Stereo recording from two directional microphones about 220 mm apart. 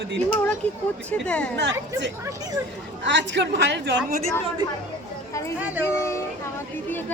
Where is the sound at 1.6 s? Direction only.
55° right (ahead or behind).